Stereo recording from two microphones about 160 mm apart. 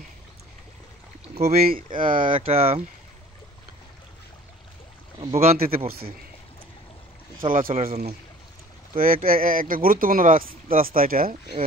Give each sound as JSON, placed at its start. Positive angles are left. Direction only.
{"t": 1.3, "sound": "rowboat", "side_deg": -40}
{"t": 1.7, "sound": "speech", "side_deg": -60}
{"t": 2.3, "sound": "speech", "side_deg": -40}
{"t": 5.3, "sound": "speech", "side_deg": -40}
{"t": 5.9, "sound": "speech", "side_deg": -70}
{"t": 7.5, "sound": "speech", "side_deg": -55}
{"t": 8.9, "sound": "speech", "side_deg": -60}